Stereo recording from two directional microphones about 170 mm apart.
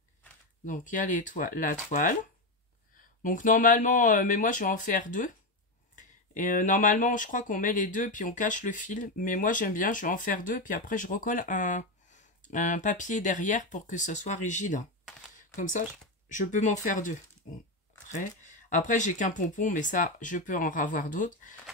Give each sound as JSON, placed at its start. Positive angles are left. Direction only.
{"t": 0.7, "sound": "speech", "side_deg": 50}